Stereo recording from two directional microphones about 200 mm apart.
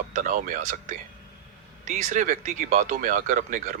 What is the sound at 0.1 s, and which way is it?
Speech, 40° right (ahead or behind).